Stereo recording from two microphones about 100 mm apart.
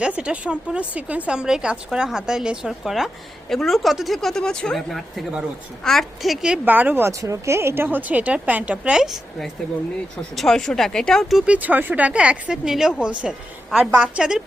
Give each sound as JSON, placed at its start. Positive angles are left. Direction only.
{"t": 0.2, "sound": "a woman's voice", "side_deg": -10}
{"t": 6.7, "sound": "a woman's voice", "side_deg": -15}
{"t": 11.4, "sound": "a woman's voice", "side_deg": -15}